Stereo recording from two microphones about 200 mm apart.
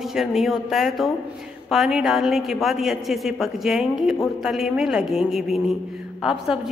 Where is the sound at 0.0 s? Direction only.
Centre (ahead or behind).